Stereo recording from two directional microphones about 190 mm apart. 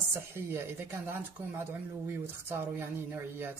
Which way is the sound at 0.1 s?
15° right (ahead or behind).